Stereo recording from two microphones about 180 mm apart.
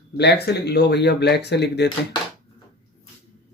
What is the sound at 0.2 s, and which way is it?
Speech, 65° left (ahead or behind).